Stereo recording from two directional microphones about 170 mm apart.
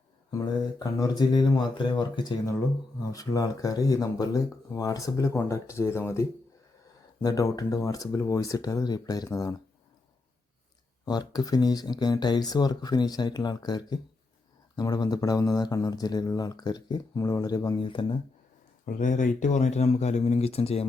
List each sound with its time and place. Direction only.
0.3 s speech: 20° left (ahead or behind)
11.0 s speech: 25° left (ahead or behind)
18.9 s speech: 50° left (ahead or behind)